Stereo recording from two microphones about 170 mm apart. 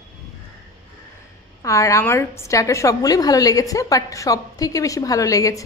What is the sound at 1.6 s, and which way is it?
A woman's voice, 20° left (ahead or behind).